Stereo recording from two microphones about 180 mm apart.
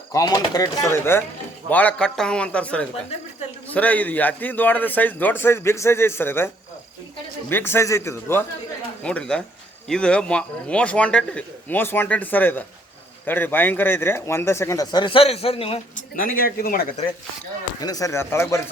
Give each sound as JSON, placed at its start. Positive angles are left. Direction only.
{"t": 0.1, "sound": "a man's voice", "side_deg": 20}
{"t": 7.5, "sound": "a man's voice", "side_deg": 15}
{"t": 16.1, "sound": "speech", "side_deg": 50}
{"t": 17.7, "sound": "a man's voice", "side_deg": 20}